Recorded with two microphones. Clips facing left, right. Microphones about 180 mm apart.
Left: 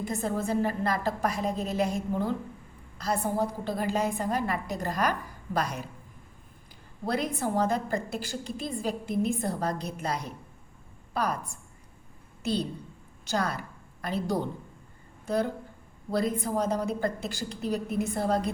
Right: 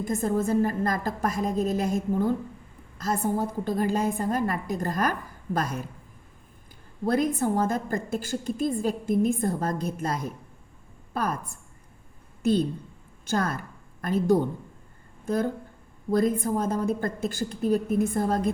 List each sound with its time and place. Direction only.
0.0 s a woman's voice: 45° right (ahead or behind)
7.1 s a woman's voice: 50° right (ahead or behind)
12.4 s a woman's voice: 50° right (ahead or behind)
16.1 s a woman's voice: 45° right (ahead or behind)